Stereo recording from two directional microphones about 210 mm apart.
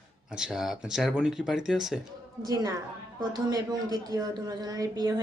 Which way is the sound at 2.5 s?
15° right (ahead or behind).